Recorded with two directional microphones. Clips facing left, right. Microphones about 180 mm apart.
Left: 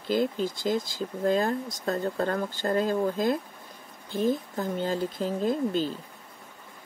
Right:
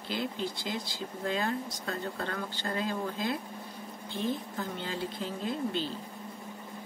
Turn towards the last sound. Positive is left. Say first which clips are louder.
# left 6 dB
turn(degrees=45)  # may be behind; listen again after turning